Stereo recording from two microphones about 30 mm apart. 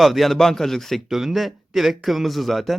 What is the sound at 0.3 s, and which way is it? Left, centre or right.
Speech, centre.